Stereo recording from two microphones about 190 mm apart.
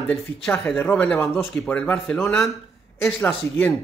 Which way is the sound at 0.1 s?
5° left (ahead or behind).